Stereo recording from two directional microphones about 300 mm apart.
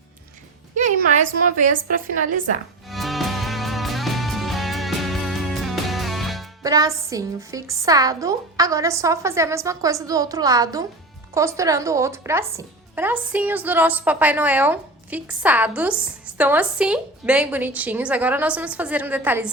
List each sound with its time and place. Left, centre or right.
0.8 s a woman's voice: right
2.9 s music: centre
6.6 s a woman's voice: centre